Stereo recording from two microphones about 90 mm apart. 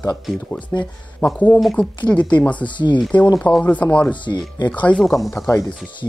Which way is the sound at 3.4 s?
15° left (ahead or behind).